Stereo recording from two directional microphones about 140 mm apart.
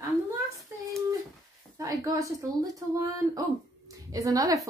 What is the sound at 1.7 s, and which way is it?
A woman's voice, 25° right (ahead or behind).